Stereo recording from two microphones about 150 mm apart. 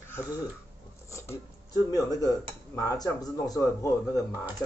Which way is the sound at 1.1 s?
20° left (ahead or behind).